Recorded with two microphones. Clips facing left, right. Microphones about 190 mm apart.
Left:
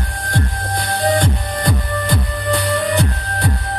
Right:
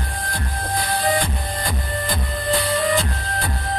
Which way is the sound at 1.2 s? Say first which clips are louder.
Left 5 dB; 70° left (ahead or behind).